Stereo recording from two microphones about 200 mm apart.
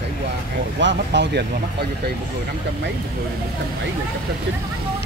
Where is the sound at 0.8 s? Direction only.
60° right (ahead or behind).